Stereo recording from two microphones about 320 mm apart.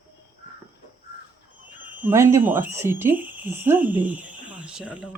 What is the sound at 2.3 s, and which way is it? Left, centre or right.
Speech, centre.